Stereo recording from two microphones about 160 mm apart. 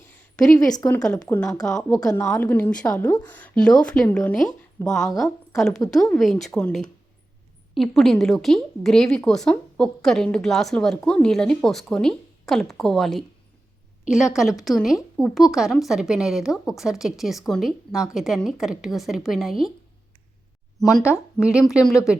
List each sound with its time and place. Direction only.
0.9 s a woman's voice: 5° left (ahead or behind)
2.0 s a woman's voice: 20° left (ahead or behind); by 19.7 s centre (ahead or behind)
21.3 s a woman's voice: 5° right (ahead or behind)